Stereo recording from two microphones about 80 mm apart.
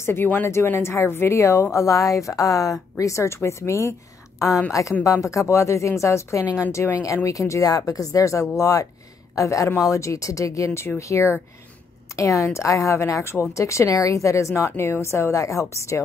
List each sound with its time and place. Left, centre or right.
0.0 s a woman's voice: left
5.0 s a woman's voice: left